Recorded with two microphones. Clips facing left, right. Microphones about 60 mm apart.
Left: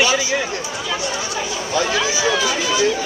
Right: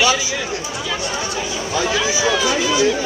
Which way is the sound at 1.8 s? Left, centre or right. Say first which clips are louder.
Even; centre.